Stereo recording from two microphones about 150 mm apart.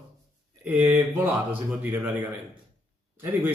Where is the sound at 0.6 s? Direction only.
10° right (ahead or behind).